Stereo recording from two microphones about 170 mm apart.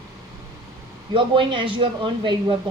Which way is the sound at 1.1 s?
30° right (ahead or behind).